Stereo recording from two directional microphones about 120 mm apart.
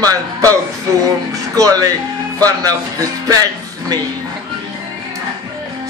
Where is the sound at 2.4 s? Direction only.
30° right (ahead or behind).